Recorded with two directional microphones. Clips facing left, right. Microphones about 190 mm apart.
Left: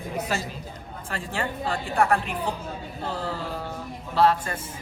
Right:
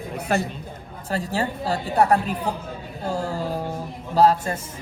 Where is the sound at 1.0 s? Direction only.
40° right (ahead or behind).